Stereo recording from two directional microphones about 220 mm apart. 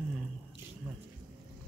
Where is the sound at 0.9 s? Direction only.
5° right (ahead or behind).